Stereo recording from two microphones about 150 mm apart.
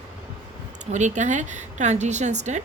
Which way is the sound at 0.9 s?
55° right (ahead or behind).